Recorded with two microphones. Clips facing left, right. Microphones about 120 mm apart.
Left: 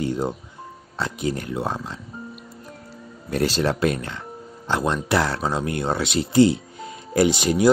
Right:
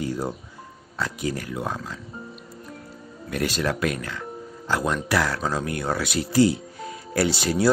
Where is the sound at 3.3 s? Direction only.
30° left (ahead or behind).